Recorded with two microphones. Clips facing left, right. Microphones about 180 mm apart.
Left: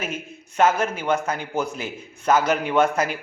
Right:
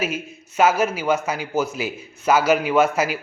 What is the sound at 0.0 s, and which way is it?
A man's voice, 10° right (ahead or behind).